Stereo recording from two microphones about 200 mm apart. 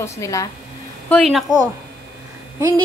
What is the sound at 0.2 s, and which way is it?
Speech, 15° left (ahead or behind).